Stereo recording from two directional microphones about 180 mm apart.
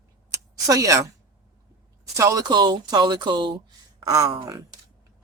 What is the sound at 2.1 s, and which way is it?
Speech, 20° right (ahead or behind).